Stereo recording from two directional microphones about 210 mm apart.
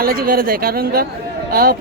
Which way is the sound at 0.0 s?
45° right (ahead or behind).